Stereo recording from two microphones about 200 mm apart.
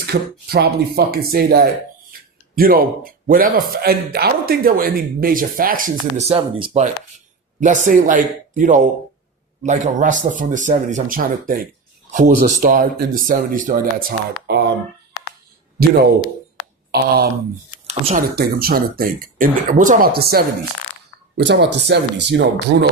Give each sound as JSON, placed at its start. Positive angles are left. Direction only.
{"t": 0.0, "sound": "speech", "side_deg": -50}
{"t": 6.2, "sound": "speech", "side_deg": -30}
{"t": 14.1, "sound": "speech", "side_deg": -55}
{"t": 16.9, "sound": "speech", "side_deg": -50}
{"t": 17.8, "sound": "speech", "side_deg": -30}
{"t": 18.3, "sound": "speech", "side_deg": -50}